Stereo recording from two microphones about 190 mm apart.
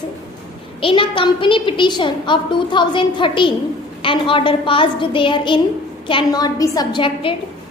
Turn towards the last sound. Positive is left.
turn(degrees=25)  # may be behind; listen again after turning